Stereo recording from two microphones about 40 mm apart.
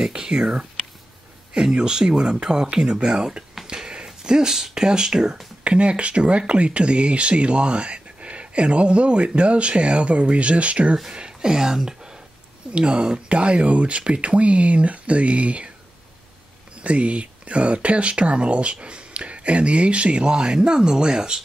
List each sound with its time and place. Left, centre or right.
0.0 s speech: centre
3.5 s a sound: centre
4.7 s speech: centre
5.6 s speech: right
11.1 s speech: centre
16.8 s speech: right